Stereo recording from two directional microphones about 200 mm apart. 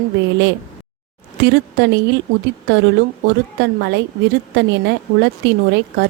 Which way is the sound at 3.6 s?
60° right (ahead or behind).